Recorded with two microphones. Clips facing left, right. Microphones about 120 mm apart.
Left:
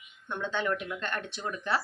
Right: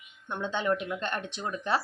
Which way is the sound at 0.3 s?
15° right (ahead or behind).